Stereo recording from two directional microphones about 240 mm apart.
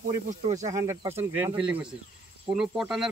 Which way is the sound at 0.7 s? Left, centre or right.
Centre.